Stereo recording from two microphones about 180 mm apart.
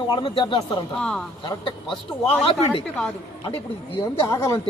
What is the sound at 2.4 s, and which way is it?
A man's voice, 30° left (ahead or behind).